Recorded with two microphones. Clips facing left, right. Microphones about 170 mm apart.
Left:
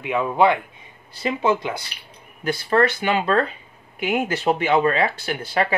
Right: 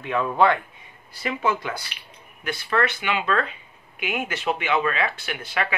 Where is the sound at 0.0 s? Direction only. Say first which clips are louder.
Left 2 dB; 15° left (ahead or behind).